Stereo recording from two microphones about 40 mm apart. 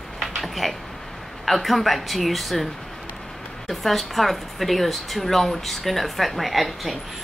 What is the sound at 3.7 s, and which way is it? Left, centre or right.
A woman's voice, centre.